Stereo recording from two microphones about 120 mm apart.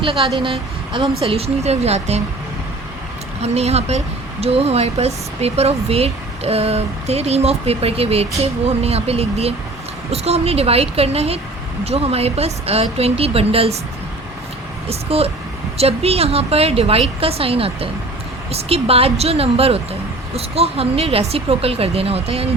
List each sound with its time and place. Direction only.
0.0 s speech: 50° right (ahead or behind)
3.4 s speech: 60° right (ahead or behind)
14.8 s speech: 55° right (ahead or behind)